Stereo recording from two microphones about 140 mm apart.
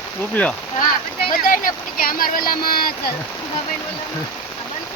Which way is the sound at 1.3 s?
85° left.